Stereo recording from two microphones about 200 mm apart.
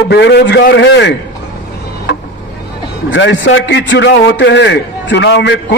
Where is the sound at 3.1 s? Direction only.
65° left (ahead or behind).